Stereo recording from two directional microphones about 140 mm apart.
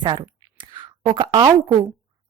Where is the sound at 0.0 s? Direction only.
30° right (ahead or behind).